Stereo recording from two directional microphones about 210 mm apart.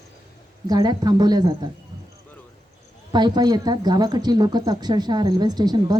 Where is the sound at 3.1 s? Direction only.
20° right (ahead or behind).